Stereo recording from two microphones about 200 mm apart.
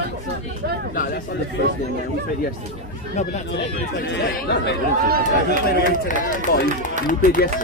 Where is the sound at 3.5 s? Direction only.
60° left (ahead or behind).